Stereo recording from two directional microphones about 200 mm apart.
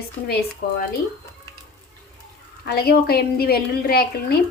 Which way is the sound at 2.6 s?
50° left (ahead or behind).